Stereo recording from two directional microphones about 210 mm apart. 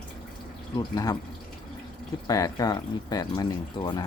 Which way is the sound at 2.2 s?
15° left (ahead or behind).